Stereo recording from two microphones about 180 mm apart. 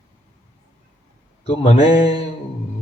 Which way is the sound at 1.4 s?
35° left (ahead or behind).